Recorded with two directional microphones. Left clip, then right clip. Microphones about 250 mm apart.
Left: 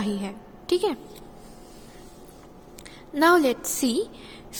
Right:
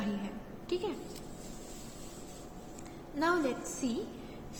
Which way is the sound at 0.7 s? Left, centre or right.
Left.